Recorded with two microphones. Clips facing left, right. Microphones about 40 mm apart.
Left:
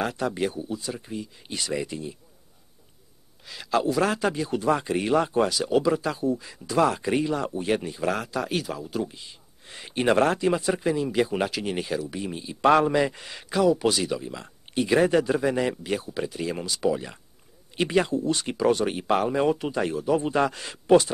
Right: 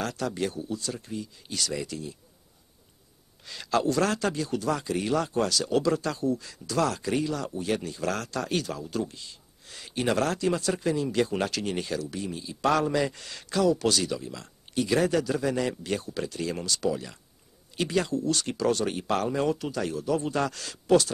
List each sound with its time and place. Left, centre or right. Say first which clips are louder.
0.0 s speech: left 3 dB; centre
3.4 s speech: left 1 dB; centre; by 21.1 s left